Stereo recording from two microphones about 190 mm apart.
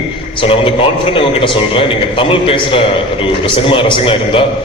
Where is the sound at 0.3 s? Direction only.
30° left (ahead or behind).